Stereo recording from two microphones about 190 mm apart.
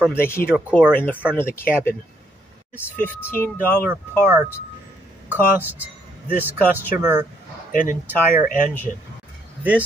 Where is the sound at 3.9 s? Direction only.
10° right (ahead or behind).